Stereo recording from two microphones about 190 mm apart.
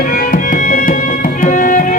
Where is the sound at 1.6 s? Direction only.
45° left (ahead or behind).